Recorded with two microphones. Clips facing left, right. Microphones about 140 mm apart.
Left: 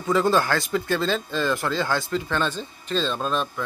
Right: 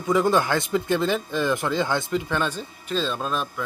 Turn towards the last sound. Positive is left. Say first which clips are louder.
# left 2 dB
turn(degrees=-5)  # may be behind; listen again after turning